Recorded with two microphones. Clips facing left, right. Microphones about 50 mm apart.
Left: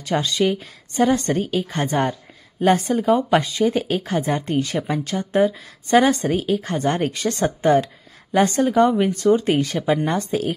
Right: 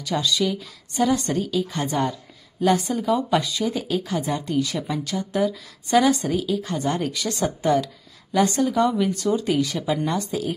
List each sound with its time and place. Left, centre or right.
0.0 s speech: left